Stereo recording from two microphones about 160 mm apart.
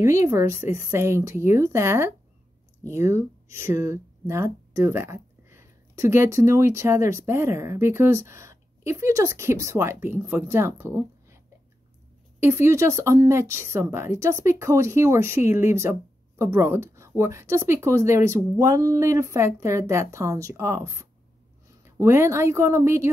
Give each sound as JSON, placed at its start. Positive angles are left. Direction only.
{"t": 0.0, "sound": "speech", "side_deg": -20}
{"t": 12.4, "sound": "speech", "side_deg": -15}